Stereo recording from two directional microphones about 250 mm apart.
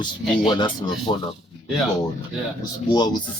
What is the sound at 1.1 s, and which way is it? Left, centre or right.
Speech, centre.